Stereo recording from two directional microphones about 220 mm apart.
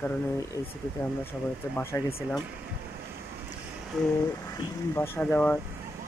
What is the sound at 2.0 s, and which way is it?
Speech, 25° left (ahead or behind).